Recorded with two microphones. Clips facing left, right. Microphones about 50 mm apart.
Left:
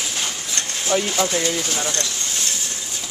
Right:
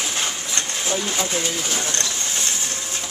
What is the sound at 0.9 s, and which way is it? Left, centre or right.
Speech, left.